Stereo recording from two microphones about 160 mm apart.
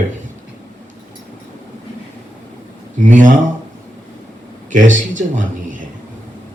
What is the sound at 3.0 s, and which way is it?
Speech, 55° right (ahead or behind).